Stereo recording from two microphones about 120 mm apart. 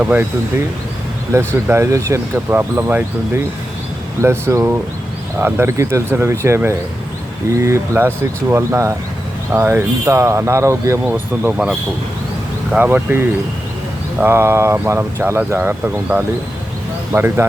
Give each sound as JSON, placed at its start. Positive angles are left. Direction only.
{"t": 0.0, "sound": "speech", "side_deg": -15}
{"t": 1.6, "sound": "speech", "side_deg": -20}
{"t": 11.1, "sound": "speech", "side_deg": -10}